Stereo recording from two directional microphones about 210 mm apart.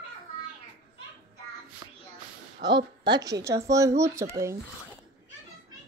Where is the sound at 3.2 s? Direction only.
15° right (ahead or behind).